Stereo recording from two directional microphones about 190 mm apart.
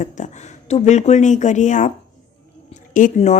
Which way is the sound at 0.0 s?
40° left (ahead or behind).